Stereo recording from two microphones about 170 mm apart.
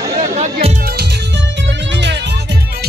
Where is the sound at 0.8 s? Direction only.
70° right (ahead or behind); by 2.3 s 90° right.